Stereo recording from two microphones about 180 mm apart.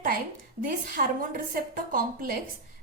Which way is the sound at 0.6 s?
50° right (ahead or behind).